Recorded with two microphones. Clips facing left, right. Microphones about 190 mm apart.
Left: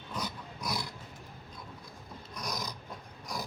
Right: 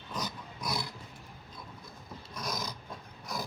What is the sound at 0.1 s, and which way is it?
Roar, 10° right (ahead or behind).